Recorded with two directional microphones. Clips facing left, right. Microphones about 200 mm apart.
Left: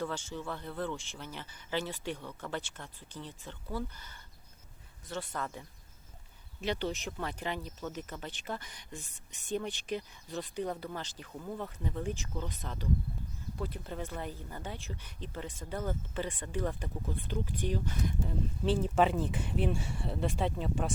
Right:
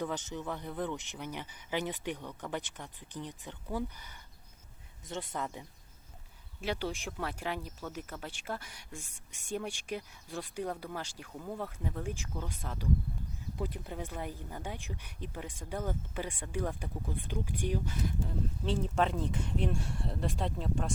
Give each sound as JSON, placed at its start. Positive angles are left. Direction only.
{"t": 0.0, "sound": "speech", "side_deg": -20}
{"t": 6.6, "sound": "speech", "side_deg": -10}
{"t": 18.6, "sound": "speech", "side_deg": 5}